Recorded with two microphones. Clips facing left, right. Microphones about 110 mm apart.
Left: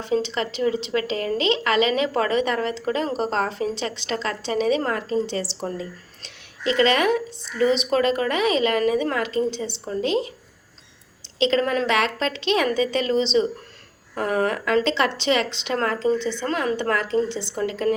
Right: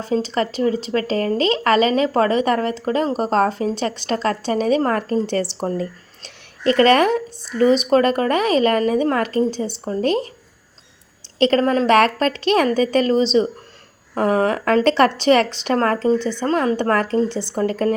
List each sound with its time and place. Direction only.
0.0 s a woman's voice: 40° right (ahead or behind)
7.1 s a woman's voice: 40° right (ahead or behind)
11.3 s a woman's voice: 50° right (ahead or behind)